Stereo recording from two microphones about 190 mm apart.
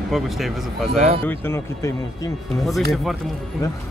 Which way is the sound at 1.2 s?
10° left (ahead or behind).